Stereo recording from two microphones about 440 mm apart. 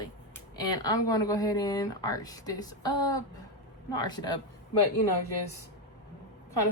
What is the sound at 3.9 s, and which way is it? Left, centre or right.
Speech, centre.